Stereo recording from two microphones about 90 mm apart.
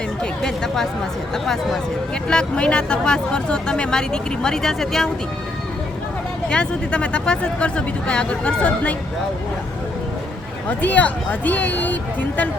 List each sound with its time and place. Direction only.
0.4 s speech: 5° left (ahead or behind)
2.2 s speech: 10° left (ahead or behind)
6.5 s speech: 10° left (ahead or behind)
10.7 s speech: 15° left (ahead or behind)